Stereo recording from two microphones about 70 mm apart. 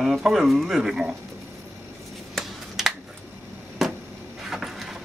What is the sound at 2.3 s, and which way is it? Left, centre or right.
Finger snapping, centre.